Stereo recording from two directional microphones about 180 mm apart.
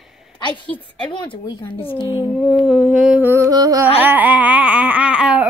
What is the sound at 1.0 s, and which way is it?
Speech, 25° left (ahead or behind).